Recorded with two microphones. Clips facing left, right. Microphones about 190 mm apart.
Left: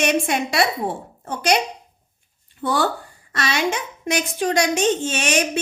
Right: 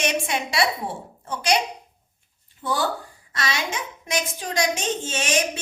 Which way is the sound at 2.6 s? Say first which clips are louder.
Left 4 dB; 65° left (ahead or behind).